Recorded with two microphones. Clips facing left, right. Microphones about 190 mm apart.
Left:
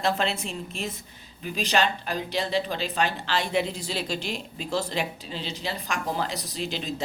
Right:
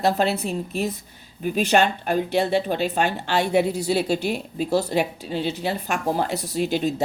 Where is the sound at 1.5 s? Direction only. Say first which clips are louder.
Right 5 dB; 50° right (ahead or behind).